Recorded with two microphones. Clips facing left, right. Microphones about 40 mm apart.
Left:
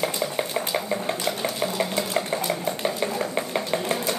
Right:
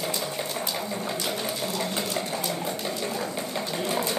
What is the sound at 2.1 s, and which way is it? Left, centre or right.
Sewing machine, centre.